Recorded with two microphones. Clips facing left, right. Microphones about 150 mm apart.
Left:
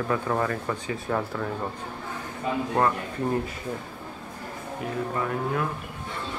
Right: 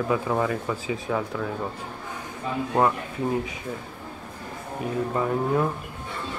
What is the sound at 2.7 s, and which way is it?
Speech, 10° right (ahead or behind).